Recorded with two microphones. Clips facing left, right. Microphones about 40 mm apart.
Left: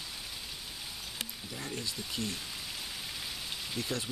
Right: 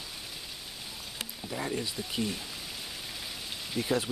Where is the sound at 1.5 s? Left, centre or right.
Centre.